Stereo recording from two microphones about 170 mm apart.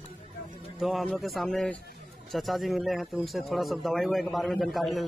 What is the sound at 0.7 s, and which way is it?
Speech, centre (ahead or behind).